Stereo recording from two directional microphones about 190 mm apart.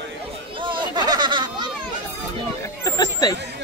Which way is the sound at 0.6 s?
25° right (ahead or behind).